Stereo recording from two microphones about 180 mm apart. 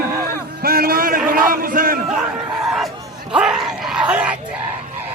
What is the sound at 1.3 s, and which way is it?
Speech, 50° right (ahead or behind).